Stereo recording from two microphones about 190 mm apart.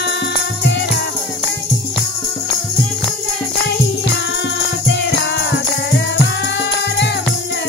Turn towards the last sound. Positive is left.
turn(degrees=70)  # may be behind; listen again after turning